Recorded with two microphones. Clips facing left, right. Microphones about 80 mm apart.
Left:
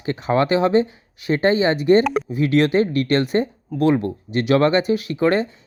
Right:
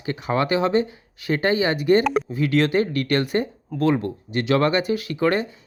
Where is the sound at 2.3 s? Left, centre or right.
Left.